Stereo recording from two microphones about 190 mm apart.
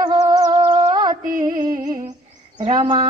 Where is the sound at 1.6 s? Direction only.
20° right (ahead or behind).